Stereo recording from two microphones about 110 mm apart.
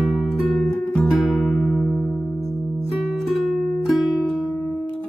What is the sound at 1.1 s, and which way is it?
Music, centre (ahead or behind).